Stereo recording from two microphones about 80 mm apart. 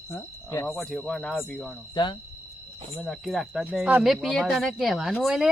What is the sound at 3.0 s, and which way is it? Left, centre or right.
Speech, centre.